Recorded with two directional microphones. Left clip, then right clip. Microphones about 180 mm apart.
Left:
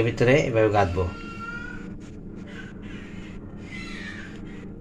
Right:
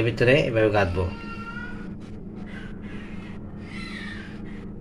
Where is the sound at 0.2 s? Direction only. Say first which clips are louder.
Right 1 dB; 15° left (ahead or behind).